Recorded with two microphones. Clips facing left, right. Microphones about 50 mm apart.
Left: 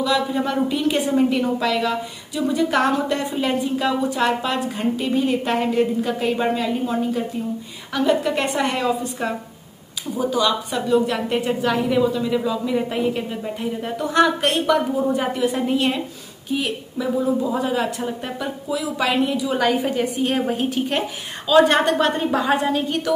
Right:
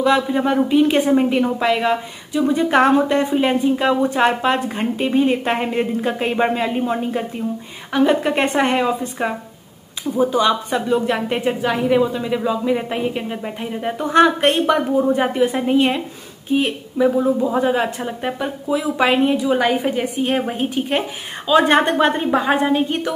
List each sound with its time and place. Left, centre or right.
0.0 s a woman's voice: right